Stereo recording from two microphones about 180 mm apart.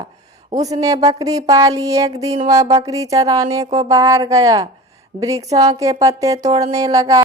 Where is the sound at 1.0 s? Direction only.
20° right (ahead or behind).